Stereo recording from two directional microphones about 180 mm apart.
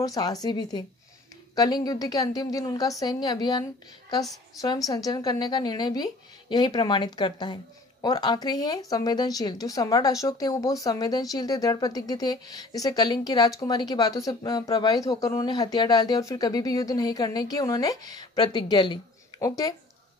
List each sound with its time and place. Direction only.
0.0 s a woman's voice: 20° left (ahead or behind)